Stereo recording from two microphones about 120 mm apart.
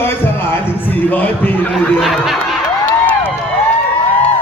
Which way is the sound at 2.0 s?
Centre (ahead or behind).